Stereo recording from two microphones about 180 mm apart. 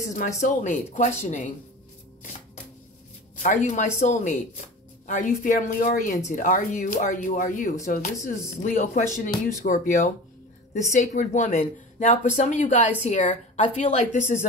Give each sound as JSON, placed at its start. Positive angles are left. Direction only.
{"t": 0.4, "sound": "speech", "side_deg": 45}
{"t": 3.3, "sound": "speech", "side_deg": 45}